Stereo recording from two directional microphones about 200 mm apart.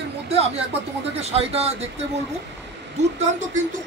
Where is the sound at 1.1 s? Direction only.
30° right (ahead or behind).